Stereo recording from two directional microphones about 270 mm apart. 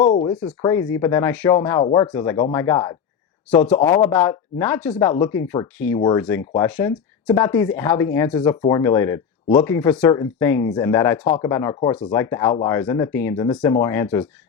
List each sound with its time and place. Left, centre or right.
0.0 s speech: left